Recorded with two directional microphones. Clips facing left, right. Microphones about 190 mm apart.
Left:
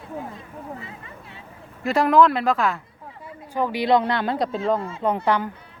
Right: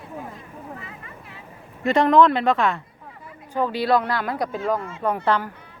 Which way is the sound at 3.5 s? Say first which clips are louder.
Left 1 dB; 15° left (ahead or behind).